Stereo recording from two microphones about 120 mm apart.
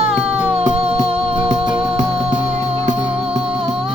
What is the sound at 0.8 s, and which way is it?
Music, 55° right (ahead or behind).